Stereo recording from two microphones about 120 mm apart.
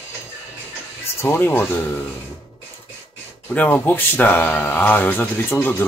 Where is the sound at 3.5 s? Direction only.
15° left (ahead or behind).